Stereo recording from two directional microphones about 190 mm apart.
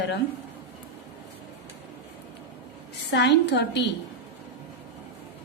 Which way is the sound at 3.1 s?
65° left (ahead or behind).